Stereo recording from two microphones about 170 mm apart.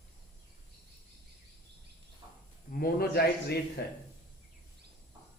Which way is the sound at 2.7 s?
60° left (ahead or behind).